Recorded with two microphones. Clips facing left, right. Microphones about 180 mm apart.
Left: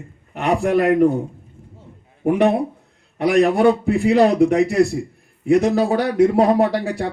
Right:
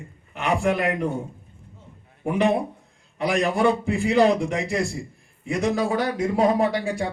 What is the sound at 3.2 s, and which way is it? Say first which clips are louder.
Speech: left 7 dB; 60° left (ahead or behind).